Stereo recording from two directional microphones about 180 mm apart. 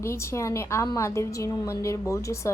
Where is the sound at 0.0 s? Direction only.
15° left (ahead or behind).